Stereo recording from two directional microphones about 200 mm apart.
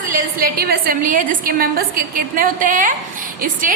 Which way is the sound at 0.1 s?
45° right (ahead or behind).